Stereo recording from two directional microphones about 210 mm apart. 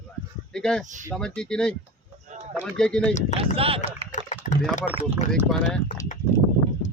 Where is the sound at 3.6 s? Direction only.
25° right (ahead or behind).